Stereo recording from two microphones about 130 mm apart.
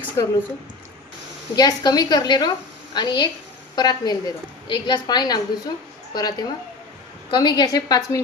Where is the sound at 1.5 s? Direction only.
30° left (ahead or behind).